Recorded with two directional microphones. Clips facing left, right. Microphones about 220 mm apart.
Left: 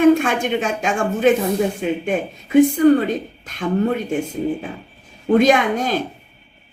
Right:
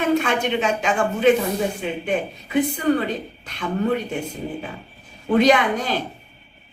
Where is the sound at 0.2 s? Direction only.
45° left (ahead or behind).